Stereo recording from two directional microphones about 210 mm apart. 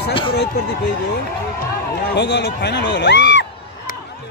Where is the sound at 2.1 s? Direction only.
55° left (ahead or behind).